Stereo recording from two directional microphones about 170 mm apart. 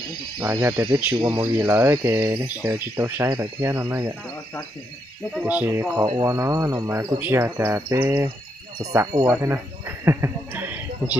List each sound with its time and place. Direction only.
0.4 s speech: 15° right (ahead or behind)
1.2 s speech: 25° right (ahead or behind)
5.3 s speech: 5° right (ahead or behind)